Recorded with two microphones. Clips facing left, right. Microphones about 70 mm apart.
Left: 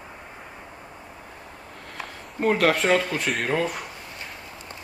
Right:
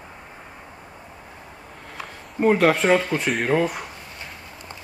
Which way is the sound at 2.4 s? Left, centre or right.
Centre.